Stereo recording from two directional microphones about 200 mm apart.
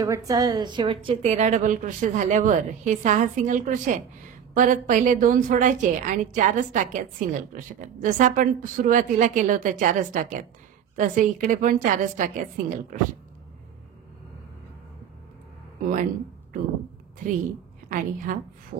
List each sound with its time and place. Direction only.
0.0 s a woman's voice: 15° right (ahead or behind); by 13.0 s 40° right (ahead or behind)
17.8 s a woman's voice: 40° right (ahead or behind)